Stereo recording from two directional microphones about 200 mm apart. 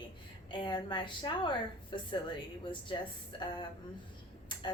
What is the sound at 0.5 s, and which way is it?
A woman's voice, 25° left (ahead or behind).